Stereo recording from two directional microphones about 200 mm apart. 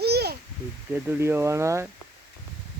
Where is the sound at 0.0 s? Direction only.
55° right (ahead or behind).